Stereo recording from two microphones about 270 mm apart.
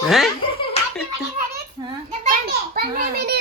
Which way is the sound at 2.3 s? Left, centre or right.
Right.